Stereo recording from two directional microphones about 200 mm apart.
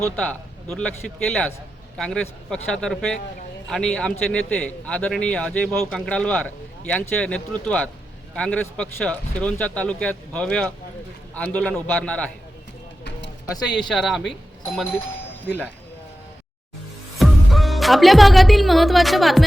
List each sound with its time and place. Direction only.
0.2 s a man's voice: 5° left (ahead or behind)
13.1 s a sound: 60° left (ahead or behind)
13.7 s a man's voice: centre (ahead or behind)
17.2 s speech: centre (ahead or behind)